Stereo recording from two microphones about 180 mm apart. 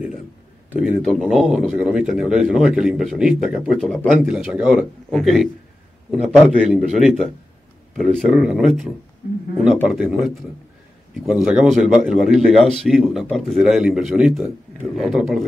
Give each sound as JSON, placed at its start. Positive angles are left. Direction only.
{"t": 0.7, "sound": "speech", "side_deg": 0}